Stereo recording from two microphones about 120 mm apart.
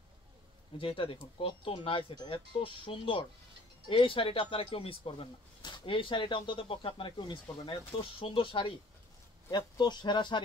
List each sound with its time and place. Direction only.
0.7 s speech: 45° left (ahead or behind)